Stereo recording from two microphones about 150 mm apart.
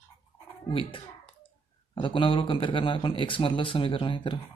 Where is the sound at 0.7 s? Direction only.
35° left (ahead or behind).